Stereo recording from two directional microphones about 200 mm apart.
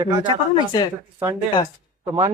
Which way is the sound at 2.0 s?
25° right (ahead or behind).